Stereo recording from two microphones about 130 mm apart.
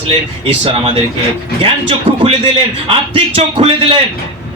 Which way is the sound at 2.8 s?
45° right (ahead or behind).